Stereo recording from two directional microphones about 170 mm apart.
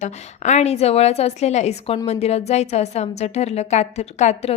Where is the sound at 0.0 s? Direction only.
45° left (ahead or behind).